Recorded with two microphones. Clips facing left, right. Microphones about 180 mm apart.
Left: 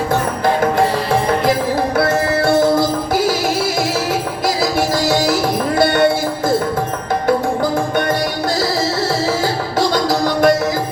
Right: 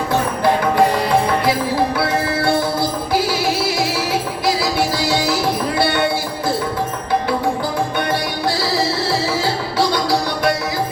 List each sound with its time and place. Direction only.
2.0 s music: 45° left (ahead or behind)
4.9 s music: 45° left (ahead or behind)
9.0 s music: 45° left (ahead or behind)